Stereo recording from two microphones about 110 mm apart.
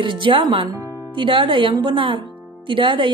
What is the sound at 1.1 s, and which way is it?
Speech, 50° right (ahead or behind).